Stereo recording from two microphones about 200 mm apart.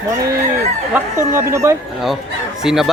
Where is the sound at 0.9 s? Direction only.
10° right (ahead or behind).